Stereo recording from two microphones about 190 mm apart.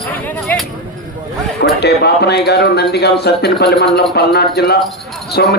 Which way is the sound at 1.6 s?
60° left (ahead or behind).